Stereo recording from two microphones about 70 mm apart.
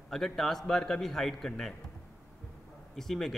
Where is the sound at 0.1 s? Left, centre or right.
Centre.